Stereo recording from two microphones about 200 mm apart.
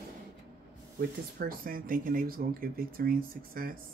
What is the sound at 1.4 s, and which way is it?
Speech, 45° right (ahead or behind).